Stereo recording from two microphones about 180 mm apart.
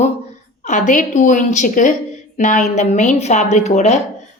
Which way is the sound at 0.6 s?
45° left (ahead or behind).